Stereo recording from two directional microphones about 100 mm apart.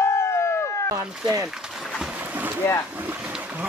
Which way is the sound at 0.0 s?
25° left (ahead or behind).